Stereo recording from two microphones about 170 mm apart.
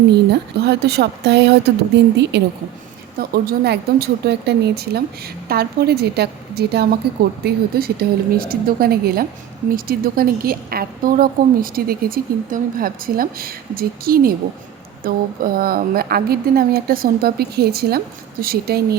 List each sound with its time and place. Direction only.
0.3 s speech: 75° right (ahead or behind)
3.2 s a woman's voice: 65° right (ahead or behind)